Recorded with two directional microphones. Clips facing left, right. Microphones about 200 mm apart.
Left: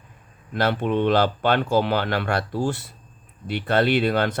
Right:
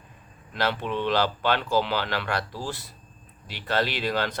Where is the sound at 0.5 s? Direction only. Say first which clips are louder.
Left 6 dB; 55° left (ahead or behind).